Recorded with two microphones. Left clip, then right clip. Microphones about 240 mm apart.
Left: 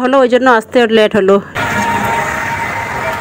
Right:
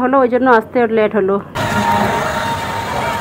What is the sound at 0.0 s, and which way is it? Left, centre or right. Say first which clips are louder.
Speech: left 3 dB; left.